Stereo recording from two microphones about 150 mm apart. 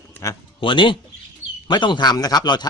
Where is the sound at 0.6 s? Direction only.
35° left (ahead or behind).